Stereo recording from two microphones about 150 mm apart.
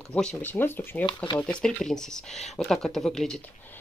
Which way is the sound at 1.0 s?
30° left (ahead or behind).